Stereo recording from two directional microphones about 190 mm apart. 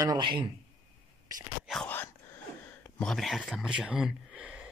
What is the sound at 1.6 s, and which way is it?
Whispering, centre (ahead or behind).